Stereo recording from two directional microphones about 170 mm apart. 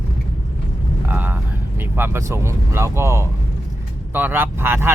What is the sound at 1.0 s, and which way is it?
Speech, 10° right (ahead or behind).